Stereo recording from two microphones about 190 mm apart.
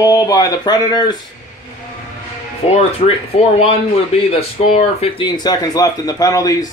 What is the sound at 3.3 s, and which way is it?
Speech, 30° left (ahead or behind).